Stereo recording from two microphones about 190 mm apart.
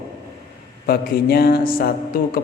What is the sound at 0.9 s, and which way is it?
A man's voice, 55° left (ahead or behind).